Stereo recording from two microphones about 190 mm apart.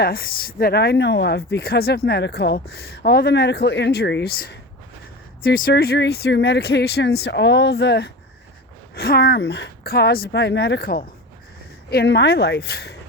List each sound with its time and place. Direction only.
0.0 s speech: 50° left (ahead or behind)